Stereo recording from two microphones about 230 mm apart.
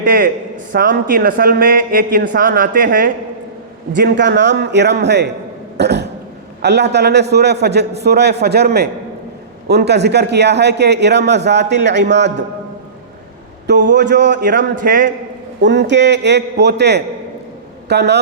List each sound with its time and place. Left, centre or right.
0.0 s a man's voice: right
3.9 s a man's voice: right
5.7 s throat clearing: right
6.6 s a man's voice: right
13.7 s a man's voice: right
15.6 s a man's voice: right